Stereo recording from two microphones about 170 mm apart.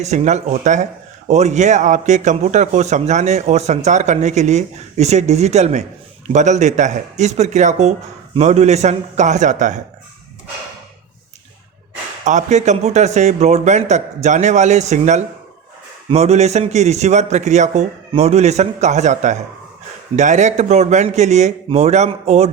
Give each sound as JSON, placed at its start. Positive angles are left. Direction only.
{"t": 0.0, "sound": "speech", "side_deg": -40}
{"t": 12.2, "sound": "a man's voice", "side_deg": -45}